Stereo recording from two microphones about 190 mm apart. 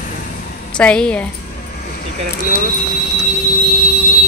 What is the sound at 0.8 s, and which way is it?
Speech, 5° left (ahead or behind).